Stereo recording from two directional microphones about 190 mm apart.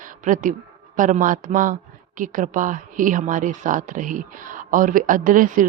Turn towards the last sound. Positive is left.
turn(degrees=-45)  # may be behind; listen again after turning